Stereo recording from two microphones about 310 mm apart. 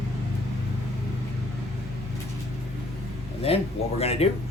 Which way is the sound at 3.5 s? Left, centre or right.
Centre.